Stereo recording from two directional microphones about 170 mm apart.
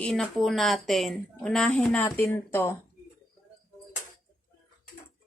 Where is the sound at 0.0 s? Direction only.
5° left (ahead or behind).